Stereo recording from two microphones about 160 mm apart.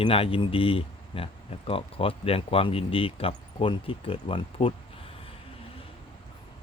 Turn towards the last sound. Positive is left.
turn(degrees=35)  # may be behind; listen again after turning